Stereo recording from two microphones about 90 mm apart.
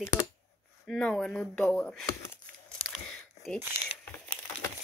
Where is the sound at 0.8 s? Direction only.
5° left (ahead or behind).